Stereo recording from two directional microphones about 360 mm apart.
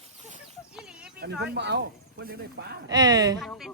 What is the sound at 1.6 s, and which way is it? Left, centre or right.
Speech, right.